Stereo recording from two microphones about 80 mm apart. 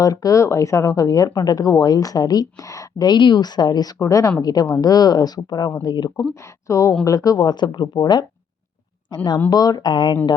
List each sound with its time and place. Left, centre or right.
0.0 s speech: left
3.1 s speech: left
3.9 s speech: left
6.7 s speech: left
9.0 s speech: left
9.5 s speech: left